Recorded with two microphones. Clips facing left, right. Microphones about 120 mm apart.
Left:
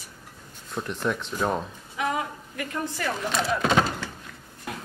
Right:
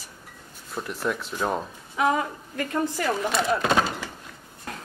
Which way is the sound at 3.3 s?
5° right (ahead or behind).